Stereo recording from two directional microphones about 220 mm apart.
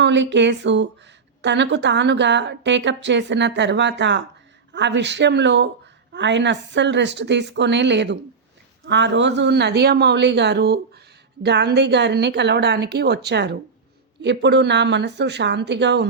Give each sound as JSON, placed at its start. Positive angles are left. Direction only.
{"t": 0.0, "sound": "a woman's voice", "side_deg": -55}